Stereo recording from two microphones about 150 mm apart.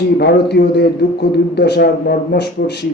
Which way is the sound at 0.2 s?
90° left.